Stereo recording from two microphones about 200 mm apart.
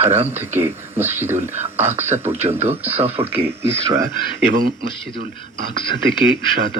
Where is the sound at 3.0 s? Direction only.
30° right (ahead or behind).